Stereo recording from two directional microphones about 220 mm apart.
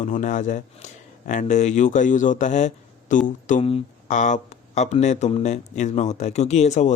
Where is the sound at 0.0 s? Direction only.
35° left (ahead or behind).